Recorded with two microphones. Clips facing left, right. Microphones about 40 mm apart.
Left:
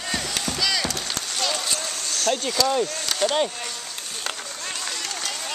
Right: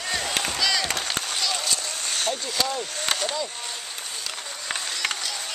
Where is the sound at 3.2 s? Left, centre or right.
Left.